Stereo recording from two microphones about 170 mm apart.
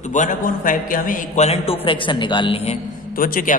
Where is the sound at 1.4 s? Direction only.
35° left (ahead or behind).